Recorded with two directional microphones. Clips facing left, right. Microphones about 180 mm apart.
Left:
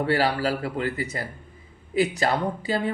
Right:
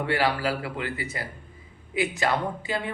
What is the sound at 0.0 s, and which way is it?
Speech, 40° left (ahead or behind).